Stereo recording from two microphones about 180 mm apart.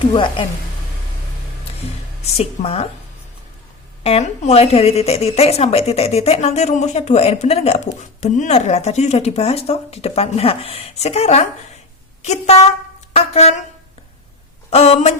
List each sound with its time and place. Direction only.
0.1 s speech: 25° left (ahead or behind)
2.2 s speech: 35° left (ahead or behind)
4.0 s speech: 35° left (ahead or behind)
14.7 s speech: 35° left (ahead or behind)